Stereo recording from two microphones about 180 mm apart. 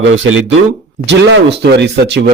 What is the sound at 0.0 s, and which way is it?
Speech, 90° right.